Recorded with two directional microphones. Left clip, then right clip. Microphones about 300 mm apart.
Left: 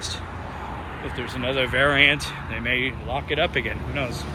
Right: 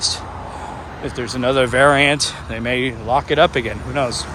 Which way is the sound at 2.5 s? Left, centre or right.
Right.